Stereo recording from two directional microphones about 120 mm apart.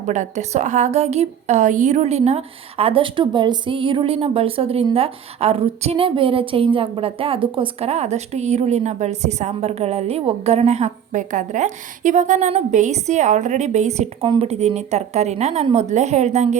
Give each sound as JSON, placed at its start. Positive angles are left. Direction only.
{"t": 0.0, "sound": "a woman's voice", "side_deg": -85}
{"t": 14.3, "sound": "a woman's voice", "side_deg": -55}